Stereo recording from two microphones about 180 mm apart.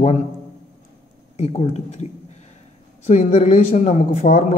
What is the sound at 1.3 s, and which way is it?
Speech, 35° left (ahead or behind).